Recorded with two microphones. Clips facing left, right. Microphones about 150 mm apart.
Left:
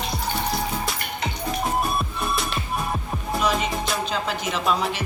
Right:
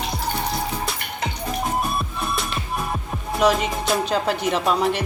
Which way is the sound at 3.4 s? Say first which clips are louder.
Right 6 dB; 85° right.